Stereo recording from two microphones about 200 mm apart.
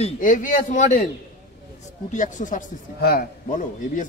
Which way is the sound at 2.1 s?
40° left (ahead or behind).